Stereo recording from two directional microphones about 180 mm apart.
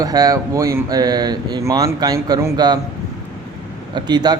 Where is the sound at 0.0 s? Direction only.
20° right (ahead or behind).